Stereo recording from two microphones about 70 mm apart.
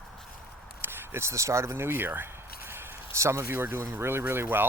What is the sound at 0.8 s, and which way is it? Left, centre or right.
Speech, right.